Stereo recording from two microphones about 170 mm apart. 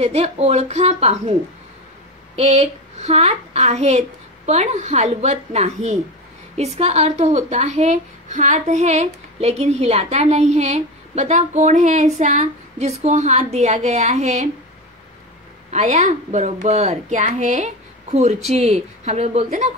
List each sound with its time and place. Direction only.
0.0 s speech: 40° right (ahead or behind)
2.3 s speech: 40° right (ahead or behind)
15.7 s speech: 40° right (ahead or behind)